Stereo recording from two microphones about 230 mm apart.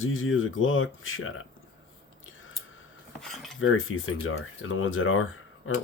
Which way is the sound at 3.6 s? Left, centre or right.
Left.